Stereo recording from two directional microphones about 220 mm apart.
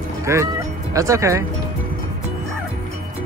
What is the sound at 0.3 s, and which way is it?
Speech, 10° right (ahead or behind).